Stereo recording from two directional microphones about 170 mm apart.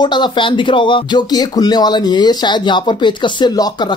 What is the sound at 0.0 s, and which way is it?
Speech, 25° left (ahead or behind).